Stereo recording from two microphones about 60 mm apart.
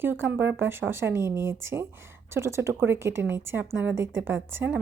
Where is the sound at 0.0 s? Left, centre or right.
Right.